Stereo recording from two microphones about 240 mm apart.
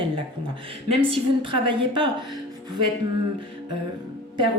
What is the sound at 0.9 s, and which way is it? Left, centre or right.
A woman's voice, right.